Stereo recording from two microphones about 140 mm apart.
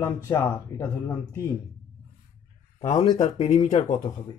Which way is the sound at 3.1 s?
65° left (ahead or behind).